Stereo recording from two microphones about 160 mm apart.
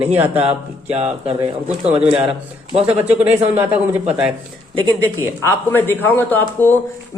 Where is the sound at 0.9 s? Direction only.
40° right (ahead or behind).